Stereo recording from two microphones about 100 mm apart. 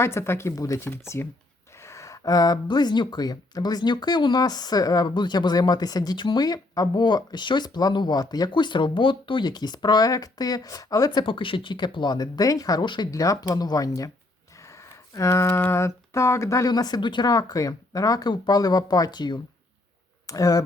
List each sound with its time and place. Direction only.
0.0 s speech: 25° left (ahead or behind)
11.2 s speech: 55° left (ahead or behind)
13.1 s speech: 35° left (ahead or behind)
15.1 s speech: 30° left (ahead or behind)